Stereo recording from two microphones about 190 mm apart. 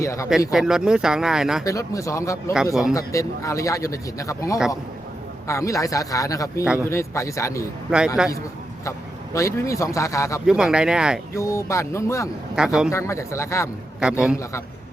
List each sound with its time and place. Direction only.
0.0 s speech: 15° left (ahead or behind)
0.3 s speech: centre (ahead or behind)
1.6 s a man's voice: 15° left (ahead or behind)
7.9 s speech: 5° right (ahead or behind)
8.8 s a man's voice: 15° left (ahead or behind)
10.4 s speech: 5° right (ahead or behind)
11.3 s a man's voice: 15° left (ahead or behind)
12.5 s speech: 5° right (ahead or behind)
12.9 s a man's voice: 15° left (ahead or behind)
14.0 s speech: 5° right (ahead or behind)